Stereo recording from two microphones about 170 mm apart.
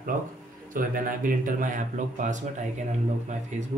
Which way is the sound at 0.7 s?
55° right (ahead or behind).